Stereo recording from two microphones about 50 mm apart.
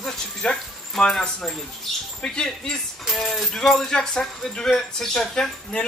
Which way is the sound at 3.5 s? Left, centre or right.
Centre.